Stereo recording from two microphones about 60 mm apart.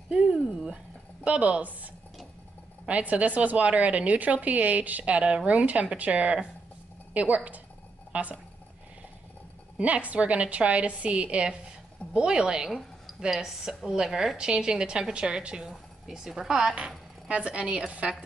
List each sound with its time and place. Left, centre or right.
1.2 s a woman's voice: centre
2.9 s a woman's voice: right
9.8 s a woman's voice: right
17.3 s a woman's voice: right